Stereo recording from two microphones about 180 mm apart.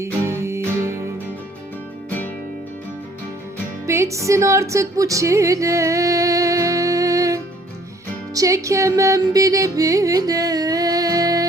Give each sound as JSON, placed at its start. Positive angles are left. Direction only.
{"t": 0.0, "sound": "music", "side_deg": -15}
{"t": 2.0, "sound": "music", "side_deg": 10}
{"t": 3.8, "sound": "music", "side_deg": -15}
{"t": 8.4, "sound": "music", "side_deg": -15}